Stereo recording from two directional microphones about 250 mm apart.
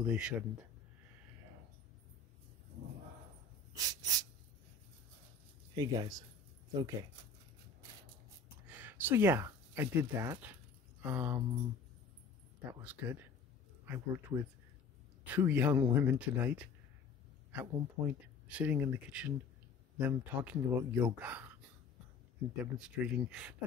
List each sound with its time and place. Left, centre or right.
0.0 s speech: centre
3.7 s speech: centre
5.8 s speech: centre
8.6 s speech: centre
12.8 s speech: centre
22.8 s speech: centre